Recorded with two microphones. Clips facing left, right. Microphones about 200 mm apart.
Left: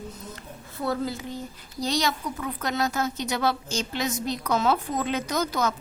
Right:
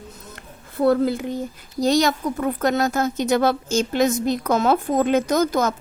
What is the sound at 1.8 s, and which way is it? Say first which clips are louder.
A woman's voice: right 8 dB; 45° right (ahead or behind).